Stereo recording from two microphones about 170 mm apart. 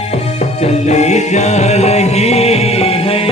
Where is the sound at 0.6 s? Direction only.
40° left (ahead or behind).